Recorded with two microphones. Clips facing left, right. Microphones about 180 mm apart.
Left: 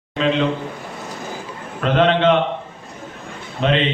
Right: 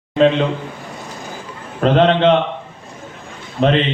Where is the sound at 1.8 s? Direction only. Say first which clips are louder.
Right 3 dB; 35° right (ahead or behind).